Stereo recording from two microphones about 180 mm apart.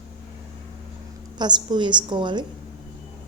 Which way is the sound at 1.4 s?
25° right (ahead or behind).